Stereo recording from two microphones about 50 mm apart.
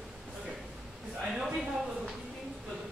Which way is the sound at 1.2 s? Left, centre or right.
Centre.